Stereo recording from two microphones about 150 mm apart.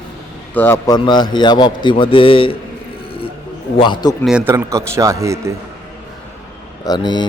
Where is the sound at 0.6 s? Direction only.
15° left (ahead or behind); by 2.5 s 35° left (ahead or behind).